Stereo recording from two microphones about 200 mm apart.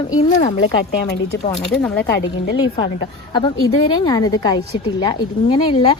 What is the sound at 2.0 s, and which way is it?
Speech, 60° left (ahead or behind).